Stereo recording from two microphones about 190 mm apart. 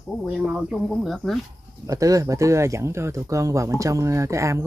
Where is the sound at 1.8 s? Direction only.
15° right (ahead or behind).